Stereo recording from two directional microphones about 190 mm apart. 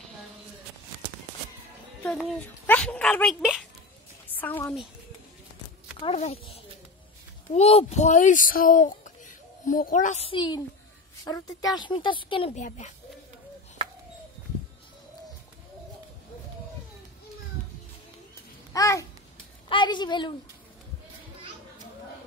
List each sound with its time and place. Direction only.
2.0 s a woman's voice: 5° left (ahead or behind)
5.9 s a woman's voice: 30° left (ahead or behind)
18.7 s babbling: 15° left (ahead or behind)
19.7 s a sound: 25° left (ahead or behind)